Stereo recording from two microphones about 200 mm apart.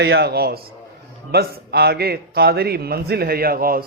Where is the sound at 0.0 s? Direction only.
55° right (ahead or behind).